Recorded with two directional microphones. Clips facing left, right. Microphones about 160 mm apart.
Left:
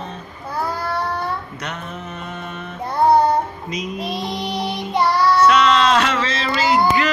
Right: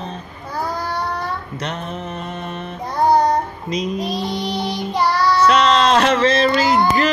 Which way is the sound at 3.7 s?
35° right (ahead or behind).